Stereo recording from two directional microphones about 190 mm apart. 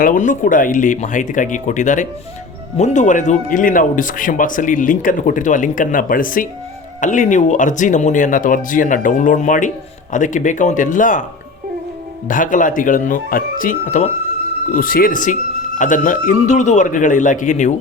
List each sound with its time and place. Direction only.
0.0 s speech: 45° left (ahead or behind)
12.3 s speech: 45° left (ahead or behind)